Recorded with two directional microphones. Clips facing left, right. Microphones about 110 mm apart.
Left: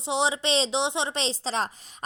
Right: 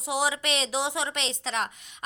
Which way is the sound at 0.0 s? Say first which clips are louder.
Left 2 dB; 25° left (ahead or behind).